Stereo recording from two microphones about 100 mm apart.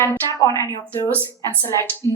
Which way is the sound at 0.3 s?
30° left (ahead or behind).